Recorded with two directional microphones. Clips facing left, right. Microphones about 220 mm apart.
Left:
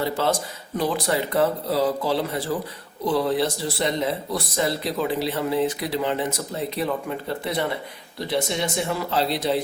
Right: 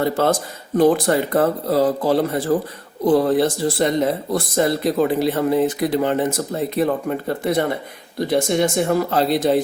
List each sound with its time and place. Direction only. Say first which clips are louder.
0.0 s speech: right 5 dB; 50° right (ahead or behind)